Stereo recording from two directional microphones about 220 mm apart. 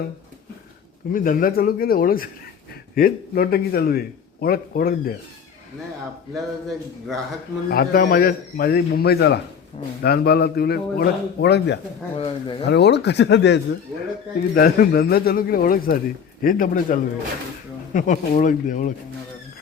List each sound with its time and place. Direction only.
1.1 s a man's voice: 40° left (ahead or behind)
6.3 s a man's voice: centre (ahead or behind)
7.7 s a man's voice: 45° left (ahead or behind)
12.1 s speech: 25° left (ahead or behind)
12.6 s a man's voice: 50° left (ahead or behind)